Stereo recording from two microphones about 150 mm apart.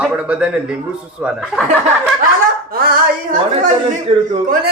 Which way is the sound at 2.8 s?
75° right (ahead or behind).